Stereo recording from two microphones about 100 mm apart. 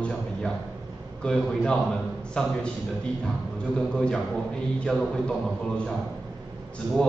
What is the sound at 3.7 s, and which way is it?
A man's voice, 5° left (ahead or behind).